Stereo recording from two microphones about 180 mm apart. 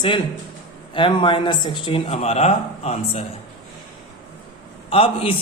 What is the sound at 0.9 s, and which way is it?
Speech, 25° left (ahead or behind).